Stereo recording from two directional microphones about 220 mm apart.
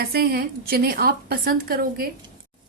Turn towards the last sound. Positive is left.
turn(degrees=-40)  # may be behind; listen again after turning